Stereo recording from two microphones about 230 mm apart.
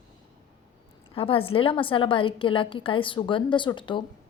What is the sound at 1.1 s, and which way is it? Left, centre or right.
A woman's voice, left.